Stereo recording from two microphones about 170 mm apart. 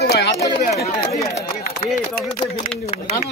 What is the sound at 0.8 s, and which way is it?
Speech, 20° left (ahead or behind).